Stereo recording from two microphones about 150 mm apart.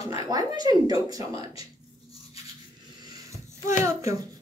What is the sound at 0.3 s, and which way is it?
Speech, 25° right (ahead or behind).